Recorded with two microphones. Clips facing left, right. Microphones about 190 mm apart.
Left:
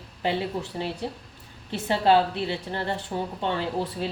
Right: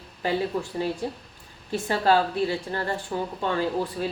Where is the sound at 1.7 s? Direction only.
20° left (ahead or behind).